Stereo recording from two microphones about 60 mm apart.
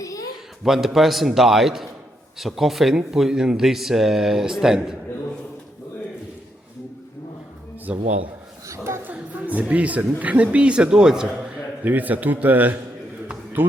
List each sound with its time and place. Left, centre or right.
0.0 s a sound: left
0.6 s speech: centre
7.9 s a man's voice: right
8.6 s chuckle: right
9.0 s music: right
10.2 s a man's voice: right
11.8 s a man's voice: right